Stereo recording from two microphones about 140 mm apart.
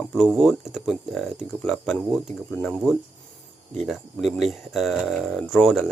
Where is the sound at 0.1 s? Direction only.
Centre (ahead or behind).